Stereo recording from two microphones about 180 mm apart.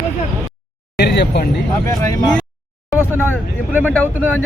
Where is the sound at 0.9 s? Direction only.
70° left (ahead or behind).